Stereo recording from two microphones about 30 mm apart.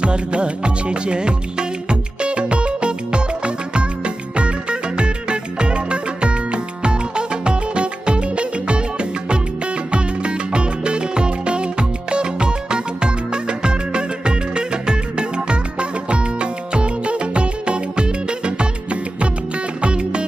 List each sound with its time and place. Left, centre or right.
0.0 s music of bollywood: right
9.9 s music: right